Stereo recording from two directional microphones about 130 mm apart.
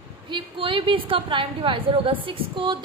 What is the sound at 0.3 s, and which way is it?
A woman's voice, 40° right (ahead or behind).